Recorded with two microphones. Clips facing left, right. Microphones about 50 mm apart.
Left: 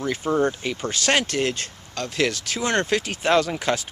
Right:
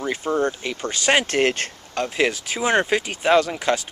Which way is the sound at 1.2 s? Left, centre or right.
Right.